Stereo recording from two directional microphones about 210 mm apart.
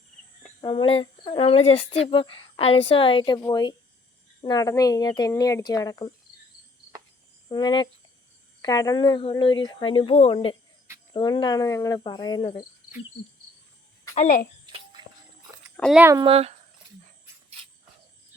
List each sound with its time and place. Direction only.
0.6 s speech: 25° left (ahead or behind)
7.4 s speech: 20° left (ahead or behind)
14.2 s a child's voice: 35° left (ahead or behind)
15.8 s speech: centre (ahead or behind)
16.2 s speech: 30° right (ahead or behind)